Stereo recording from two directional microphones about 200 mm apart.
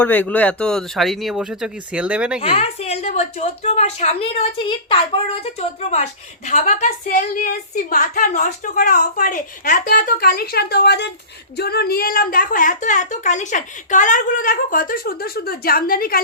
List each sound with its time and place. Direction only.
0.0 s speech: 10° left (ahead or behind)
2.4 s a woman's voice: 30° left (ahead or behind); by 16.2 s 45° left (ahead or behind)